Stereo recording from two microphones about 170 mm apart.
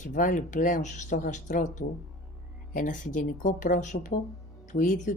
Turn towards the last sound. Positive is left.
turn(degrees=50)  # may be behind; listen again after turning